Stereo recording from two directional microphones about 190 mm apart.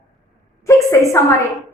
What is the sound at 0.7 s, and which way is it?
Speech, 15° left (ahead or behind).